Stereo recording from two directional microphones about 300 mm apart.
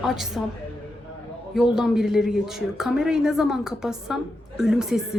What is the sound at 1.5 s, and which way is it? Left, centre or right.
A woman's voice, centre.